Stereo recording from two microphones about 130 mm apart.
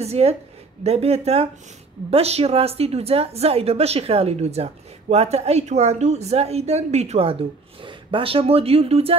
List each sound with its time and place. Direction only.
0.0 s a woman's voice: 50° right (ahead or behind)